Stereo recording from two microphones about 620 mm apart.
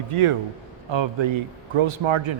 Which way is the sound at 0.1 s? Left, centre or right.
Right.